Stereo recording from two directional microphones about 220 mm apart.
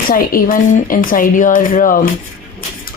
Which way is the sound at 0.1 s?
40° left (ahead or behind).